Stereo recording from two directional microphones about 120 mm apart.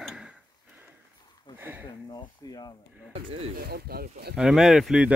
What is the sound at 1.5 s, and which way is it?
Speech, 15° right (ahead or behind).